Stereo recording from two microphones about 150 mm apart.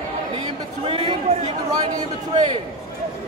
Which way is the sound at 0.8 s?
40° right (ahead or behind).